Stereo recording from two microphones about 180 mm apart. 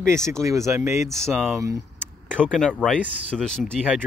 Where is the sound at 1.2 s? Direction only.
5° right (ahead or behind).